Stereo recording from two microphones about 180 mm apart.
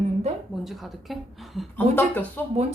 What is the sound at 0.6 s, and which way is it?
A woman's voice, centre (ahead or behind).